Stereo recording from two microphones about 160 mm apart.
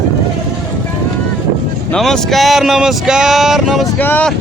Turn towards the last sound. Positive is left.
turn(degrees=10)  # may be behind; listen again after turning